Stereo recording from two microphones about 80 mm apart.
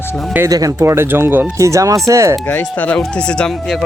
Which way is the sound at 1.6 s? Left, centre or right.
Right.